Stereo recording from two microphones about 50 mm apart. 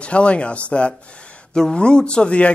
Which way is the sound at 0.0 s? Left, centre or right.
Left.